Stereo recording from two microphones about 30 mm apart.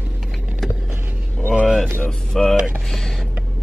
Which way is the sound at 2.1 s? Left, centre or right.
Centre.